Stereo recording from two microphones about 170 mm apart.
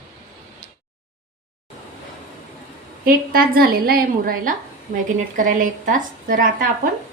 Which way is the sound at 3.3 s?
60° right (ahead or behind).